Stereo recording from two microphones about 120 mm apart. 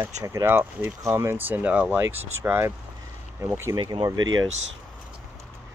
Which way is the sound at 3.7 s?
40° right (ahead or behind).